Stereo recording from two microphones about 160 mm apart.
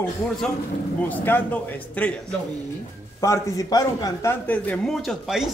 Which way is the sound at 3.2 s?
20° left (ahead or behind).